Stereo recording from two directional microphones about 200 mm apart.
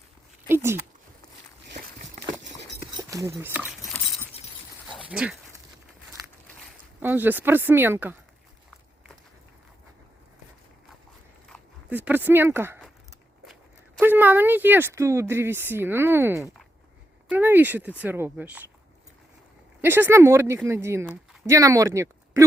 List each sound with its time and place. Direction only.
0.4 s a sound: 10° right (ahead or behind)
1.6 s walk: 55° right (ahead or behind)
3.0 s a sound: 15° right (ahead or behind)
5.1 s speech: 5° right (ahead or behind)
7.0 s speech: 10° right (ahead or behind)
11.9 s speech: 10° right (ahead or behind)
13.4 s walk: centre (ahead or behind)
14.0 s speech: 10° right (ahead or behind)
19.8 s speech: 10° right (ahead or behind)